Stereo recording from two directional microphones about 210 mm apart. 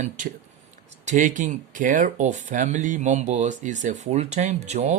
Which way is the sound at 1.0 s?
35° right (ahead or behind).